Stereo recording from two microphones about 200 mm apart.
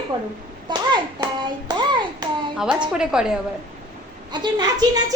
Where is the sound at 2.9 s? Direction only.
5° right (ahead or behind).